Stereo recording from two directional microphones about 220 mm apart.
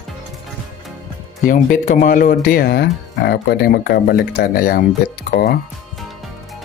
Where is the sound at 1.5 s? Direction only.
35° left (ahead or behind).